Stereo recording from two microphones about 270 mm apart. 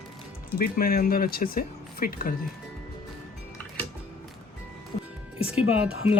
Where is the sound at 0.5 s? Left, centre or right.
Left.